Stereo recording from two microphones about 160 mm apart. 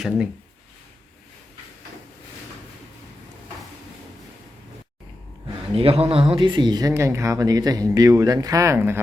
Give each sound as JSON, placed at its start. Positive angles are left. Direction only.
{"t": 5.7, "sound": "speech", "side_deg": -35}